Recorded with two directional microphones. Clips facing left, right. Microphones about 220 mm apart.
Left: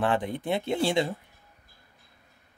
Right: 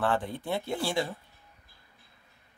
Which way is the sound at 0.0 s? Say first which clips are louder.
Left 3 dB; 15° left (ahead or behind).